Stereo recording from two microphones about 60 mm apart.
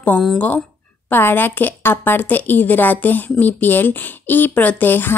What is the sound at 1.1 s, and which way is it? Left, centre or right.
A woman's voice, left.